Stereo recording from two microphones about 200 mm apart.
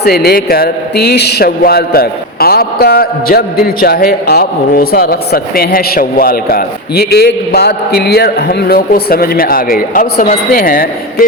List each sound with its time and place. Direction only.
0.0 s a man's voice: 50° left (ahead or behind)